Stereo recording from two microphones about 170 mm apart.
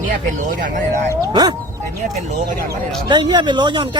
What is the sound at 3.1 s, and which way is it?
Speech, 25° right (ahead or behind).